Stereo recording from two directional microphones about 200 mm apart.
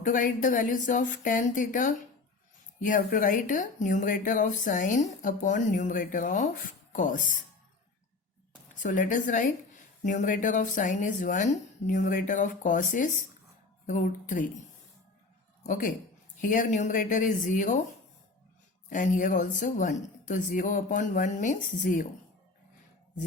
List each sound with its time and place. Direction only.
0.0 s speech: 40° left (ahead or behind)
8.7 s speech: 40° left (ahead or behind)
15.6 s a woman's voice: 40° left (ahead or behind)
18.9 s speech: 40° left (ahead or behind)